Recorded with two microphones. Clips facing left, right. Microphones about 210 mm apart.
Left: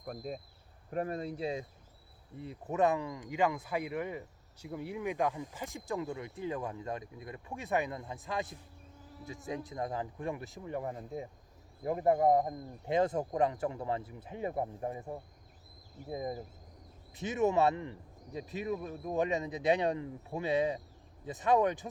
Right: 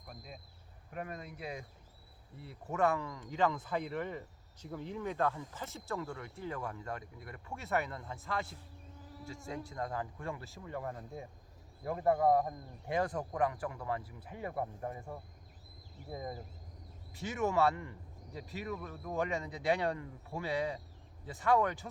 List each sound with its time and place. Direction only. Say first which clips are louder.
0.0 s speech: left 11 dB; 45° left (ahead or behind)
0.9 s a man's voice: left 8 dB; 35° left (ahead or behind)